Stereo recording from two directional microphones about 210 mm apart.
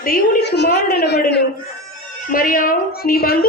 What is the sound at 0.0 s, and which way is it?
A woman's voice, 50° left (ahead or behind).